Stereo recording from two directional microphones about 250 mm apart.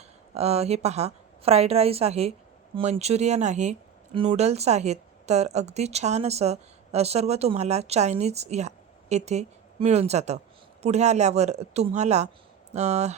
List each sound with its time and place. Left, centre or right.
0.3 s speech: right